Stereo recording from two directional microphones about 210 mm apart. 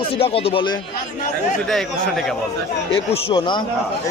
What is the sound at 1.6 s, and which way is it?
Speech, centre (ahead or behind).